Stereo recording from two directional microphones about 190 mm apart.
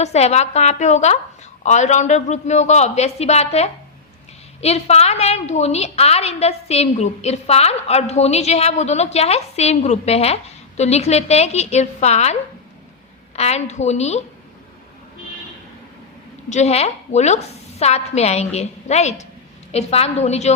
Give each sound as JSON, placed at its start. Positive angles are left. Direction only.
{"t": 0.0, "sound": "a woman's voice", "side_deg": 35}
{"t": 16.5, "sound": "a woman's voice", "side_deg": 35}